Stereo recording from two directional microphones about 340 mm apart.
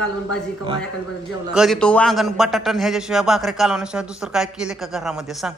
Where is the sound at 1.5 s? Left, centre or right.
Centre.